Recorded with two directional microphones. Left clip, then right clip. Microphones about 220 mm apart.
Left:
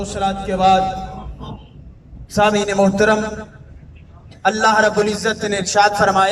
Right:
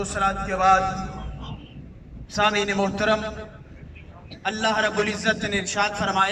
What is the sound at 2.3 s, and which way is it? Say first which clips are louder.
A man's voice: left 7 dB; 45° left (ahead or behind).